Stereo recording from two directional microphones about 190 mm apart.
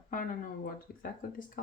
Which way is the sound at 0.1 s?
45° left (ahead or behind).